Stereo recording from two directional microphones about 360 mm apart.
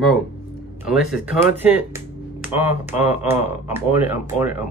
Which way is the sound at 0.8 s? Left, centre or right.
Centre.